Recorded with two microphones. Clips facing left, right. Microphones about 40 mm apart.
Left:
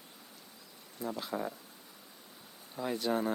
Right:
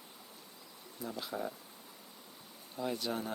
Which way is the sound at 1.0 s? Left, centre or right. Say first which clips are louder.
Left 3 dB; centre.